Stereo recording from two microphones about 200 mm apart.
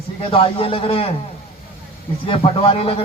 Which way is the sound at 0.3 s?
30° left (ahead or behind).